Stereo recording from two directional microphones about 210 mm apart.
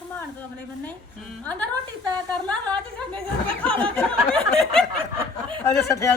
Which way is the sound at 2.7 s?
25° right (ahead or behind).